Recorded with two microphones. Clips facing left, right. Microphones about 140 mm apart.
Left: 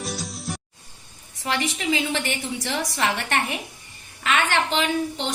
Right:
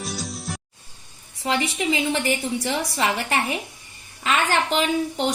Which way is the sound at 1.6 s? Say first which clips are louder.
Right 2 dB; 25° right (ahead or behind).